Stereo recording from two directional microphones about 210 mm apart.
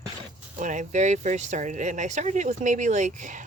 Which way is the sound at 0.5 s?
35° right (ahead or behind).